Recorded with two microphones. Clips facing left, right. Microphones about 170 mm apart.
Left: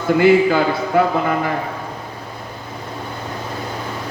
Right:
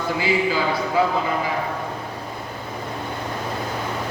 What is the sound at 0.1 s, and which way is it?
Speech, 60° left (ahead or behind).